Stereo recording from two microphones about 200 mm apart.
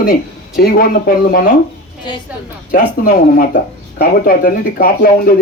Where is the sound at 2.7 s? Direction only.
45° left (ahead or behind).